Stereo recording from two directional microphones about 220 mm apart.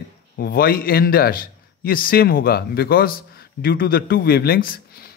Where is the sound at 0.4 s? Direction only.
40° left (ahead or behind).